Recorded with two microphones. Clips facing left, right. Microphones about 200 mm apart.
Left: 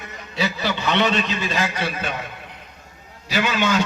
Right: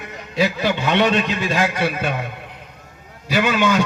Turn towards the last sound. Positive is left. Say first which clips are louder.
# right 3 dB
turn(degrees=-55)  # may be behind; listen again after turning